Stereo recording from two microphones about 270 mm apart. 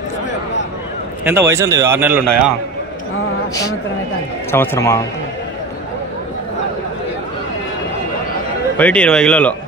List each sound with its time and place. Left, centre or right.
1.2 s a man's voice: centre
4.5 s speech: centre
8.7 s a man's voice: centre